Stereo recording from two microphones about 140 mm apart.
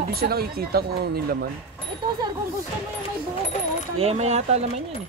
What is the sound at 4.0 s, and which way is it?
Speech, 50° right (ahead or behind).